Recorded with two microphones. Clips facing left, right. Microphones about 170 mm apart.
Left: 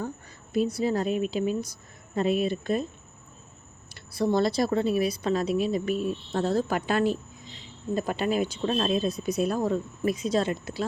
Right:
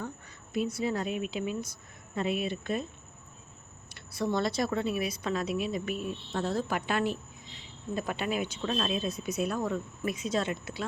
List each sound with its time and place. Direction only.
0.5 s a woman's voice: 35° left (ahead or behind)
3.9 s a woman's voice: 35° left (ahead or behind)